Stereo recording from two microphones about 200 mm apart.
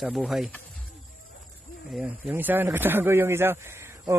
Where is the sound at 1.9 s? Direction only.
10° right (ahead or behind).